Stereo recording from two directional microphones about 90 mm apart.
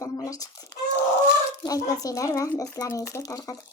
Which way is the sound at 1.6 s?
40° left (ahead or behind).